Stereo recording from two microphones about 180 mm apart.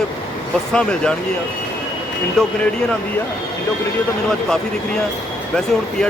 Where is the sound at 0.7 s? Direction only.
5° left (ahead or behind).